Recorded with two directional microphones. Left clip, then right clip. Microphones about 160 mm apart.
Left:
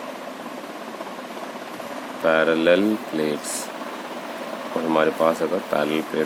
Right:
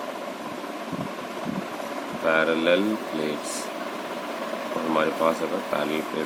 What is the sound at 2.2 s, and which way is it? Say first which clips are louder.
Speech: left 4 dB; 50° left (ahead or behind).